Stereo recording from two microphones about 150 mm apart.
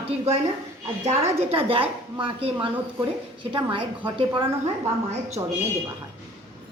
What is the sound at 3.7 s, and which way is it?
Speech, 35° right (ahead or behind).